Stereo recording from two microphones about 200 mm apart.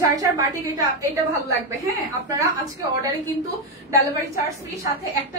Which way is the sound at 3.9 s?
15° right (ahead or behind).